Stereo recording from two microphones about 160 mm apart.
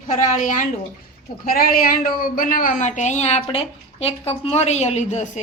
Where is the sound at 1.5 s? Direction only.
65° left (ahead or behind).